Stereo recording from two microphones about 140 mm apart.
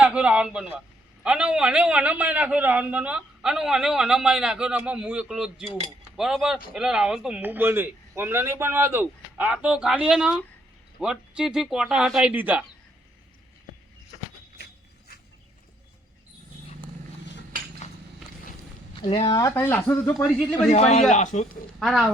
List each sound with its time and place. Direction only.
0.0 s a man's voice: 10° right (ahead or behind)
18.9 s speech: 40° left (ahead or behind)
19.3 s speech: 25° left (ahead or behind)
20.7 s speech: 55° left (ahead or behind)
21.8 s speech: centre (ahead or behind)